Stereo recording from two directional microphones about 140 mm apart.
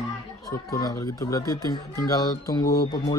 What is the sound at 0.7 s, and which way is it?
Speech, 25° left (ahead or behind).